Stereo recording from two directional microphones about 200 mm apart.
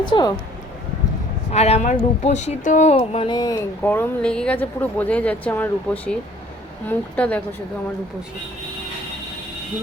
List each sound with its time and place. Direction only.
0.1 s speech: 20° left (ahead or behind)
1.5 s a woman's voice: 30° left (ahead or behind)
3.8 s a woman's voice: 5° left (ahead or behind)
7.2 s a woman's voice: 5° left (ahead or behind)